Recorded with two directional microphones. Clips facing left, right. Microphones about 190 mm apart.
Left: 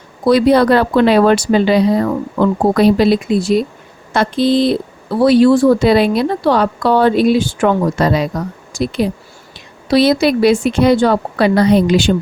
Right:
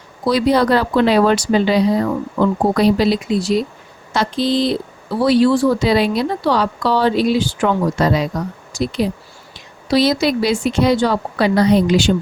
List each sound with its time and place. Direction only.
0.3 s speech: 55° left (ahead or behind)